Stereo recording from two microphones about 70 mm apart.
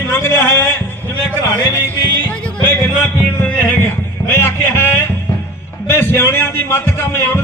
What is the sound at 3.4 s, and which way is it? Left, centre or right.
Music, left.